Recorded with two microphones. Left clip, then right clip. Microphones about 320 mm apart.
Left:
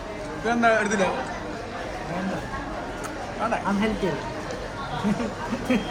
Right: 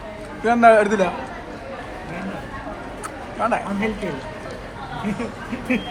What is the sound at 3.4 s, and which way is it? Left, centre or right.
Speech, centre.